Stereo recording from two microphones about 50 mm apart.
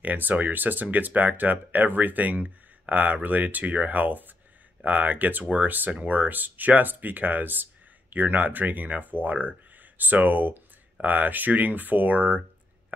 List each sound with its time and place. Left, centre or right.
0.0 s speech: right